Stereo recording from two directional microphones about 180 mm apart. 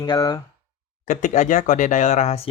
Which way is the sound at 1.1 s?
45° left (ahead or behind).